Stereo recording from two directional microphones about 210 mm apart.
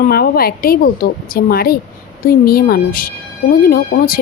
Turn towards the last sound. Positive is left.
turn(degrees=45)  # may be behind; listen again after turning